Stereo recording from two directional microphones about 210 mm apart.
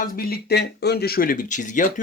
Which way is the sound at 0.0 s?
45° left (ahead or behind).